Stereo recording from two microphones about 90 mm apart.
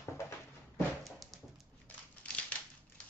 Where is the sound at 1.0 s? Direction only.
Centre (ahead or behind).